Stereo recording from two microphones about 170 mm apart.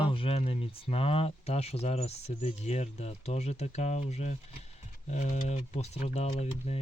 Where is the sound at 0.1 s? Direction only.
35° left (ahead or behind).